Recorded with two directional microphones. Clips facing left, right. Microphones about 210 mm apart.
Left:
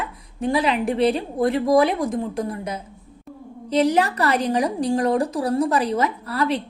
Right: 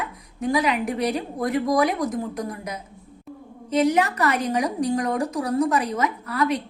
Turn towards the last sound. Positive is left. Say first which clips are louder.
# left 1 dB
turn(degrees=30)  # may be behind; listen again after turning